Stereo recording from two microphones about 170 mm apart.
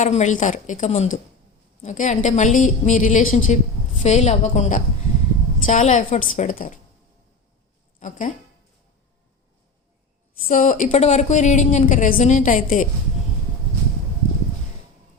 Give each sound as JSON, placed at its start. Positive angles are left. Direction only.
{"t": 0.0, "sound": "speech", "side_deg": 45}
{"t": 7.9, "sound": "speech", "side_deg": 50}
{"t": 10.4, "sound": "speech", "side_deg": 55}